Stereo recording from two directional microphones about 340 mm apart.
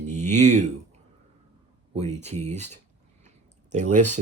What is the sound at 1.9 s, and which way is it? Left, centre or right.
Speech, centre.